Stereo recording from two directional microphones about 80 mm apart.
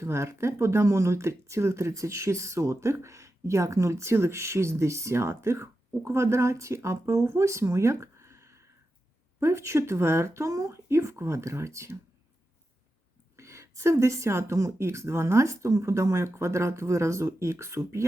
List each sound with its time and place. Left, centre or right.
0.0 s speech: right
13.3 s speech: right